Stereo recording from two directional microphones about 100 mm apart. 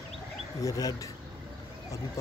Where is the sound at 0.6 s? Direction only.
35° left (ahead or behind).